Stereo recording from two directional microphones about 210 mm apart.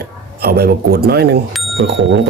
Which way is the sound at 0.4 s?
50° right (ahead or behind).